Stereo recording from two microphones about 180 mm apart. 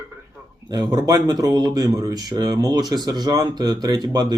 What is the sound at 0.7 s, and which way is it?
Speech, 20° right (ahead or behind).